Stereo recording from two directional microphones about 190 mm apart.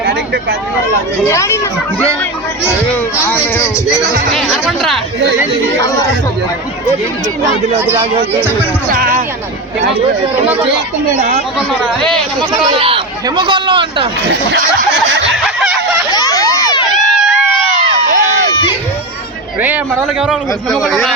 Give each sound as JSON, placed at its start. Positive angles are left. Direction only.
{"t": 1.2, "sound": "speech", "side_deg": 15}
{"t": 2.9, "sound": "speech", "side_deg": 10}
{"t": 4.3, "sound": "speech", "side_deg": 0}
{"t": 7.9, "sound": "a man's voice", "side_deg": -10}
{"t": 8.9, "sound": "speech", "side_deg": -45}
{"t": 11.8, "sound": "speech", "side_deg": 5}
{"t": 12.4, "sound": "speech", "side_deg": -25}
{"t": 15.4, "sound": "a sound", "side_deg": -5}
{"t": 16.1, "sound": "a sound", "side_deg": 20}
{"t": 18.0, "sound": "a sound", "side_deg": -40}
{"t": 19.6, "sound": "a man's voice", "side_deg": -10}
{"t": 20.7, "sound": "speech", "side_deg": 0}